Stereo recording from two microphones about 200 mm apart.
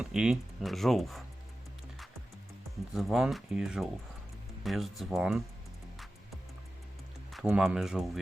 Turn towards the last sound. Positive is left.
turn(degrees=-5)  # may be behind; listen again after turning